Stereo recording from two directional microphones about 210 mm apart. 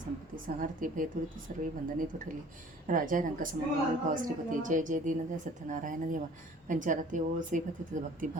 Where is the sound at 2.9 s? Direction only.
40° right (ahead or behind).